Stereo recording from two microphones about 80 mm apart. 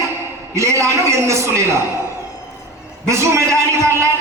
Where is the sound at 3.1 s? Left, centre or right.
Right.